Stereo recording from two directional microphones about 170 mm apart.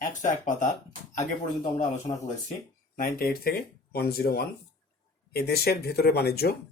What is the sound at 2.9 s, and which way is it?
Speech, 55° left (ahead or behind).